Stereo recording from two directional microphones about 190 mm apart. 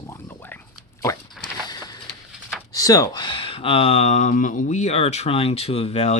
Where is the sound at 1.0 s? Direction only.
20° left (ahead or behind).